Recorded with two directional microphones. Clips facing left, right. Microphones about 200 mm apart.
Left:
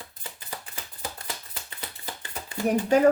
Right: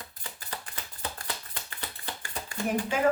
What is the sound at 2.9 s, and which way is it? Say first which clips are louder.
Speech: left 7 dB; 40° left (ahead or behind).